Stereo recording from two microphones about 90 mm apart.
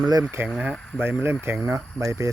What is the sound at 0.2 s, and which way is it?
Speech, 30° right (ahead or behind).